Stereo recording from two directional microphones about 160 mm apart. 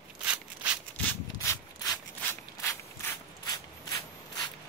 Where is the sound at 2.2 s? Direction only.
15° left (ahead or behind).